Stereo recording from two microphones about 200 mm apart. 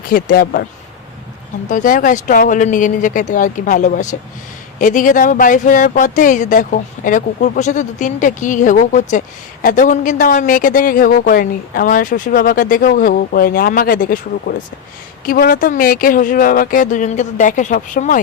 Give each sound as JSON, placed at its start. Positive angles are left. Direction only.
{"t": 0.1, "sound": "speech", "side_deg": 45}
{"t": 1.6, "sound": "speech", "side_deg": 40}